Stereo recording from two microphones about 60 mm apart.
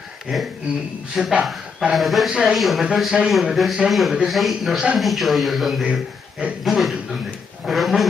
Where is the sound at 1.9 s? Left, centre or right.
Centre.